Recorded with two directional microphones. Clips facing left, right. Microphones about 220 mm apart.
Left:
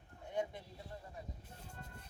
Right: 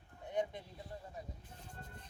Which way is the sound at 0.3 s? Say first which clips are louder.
Right 2 dB; 20° right (ahead or behind).